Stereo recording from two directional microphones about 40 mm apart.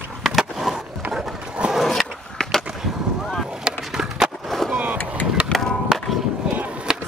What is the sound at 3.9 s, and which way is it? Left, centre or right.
Skateboard, centre.